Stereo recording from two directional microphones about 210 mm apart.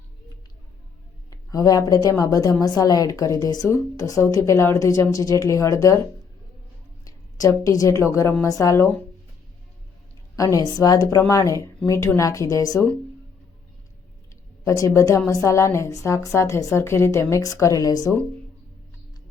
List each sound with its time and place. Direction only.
1.3 s a woman's voice: 15° left (ahead or behind)
7.0 s a woman's voice: 15° left (ahead or behind)
10.3 s a woman's voice: 15° left (ahead or behind)
14.6 s a woman's voice: 15° left (ahead or behind)